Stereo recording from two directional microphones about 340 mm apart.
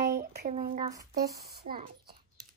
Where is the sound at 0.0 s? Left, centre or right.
Right.